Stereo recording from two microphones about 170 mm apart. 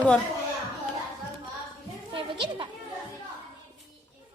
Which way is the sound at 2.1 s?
30° right (ahead or behind).